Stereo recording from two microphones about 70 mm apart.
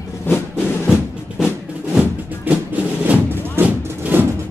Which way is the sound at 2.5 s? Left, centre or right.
Right.